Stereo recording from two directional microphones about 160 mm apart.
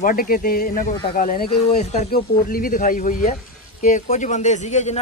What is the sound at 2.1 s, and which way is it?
A man's voice, 65° left (ahead or behind).